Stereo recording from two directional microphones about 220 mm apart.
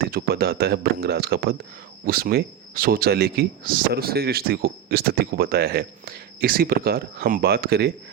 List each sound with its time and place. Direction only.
0.0 s speech: 45° right (ahead or behind)